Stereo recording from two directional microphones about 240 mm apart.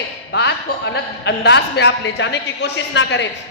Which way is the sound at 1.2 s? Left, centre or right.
Left.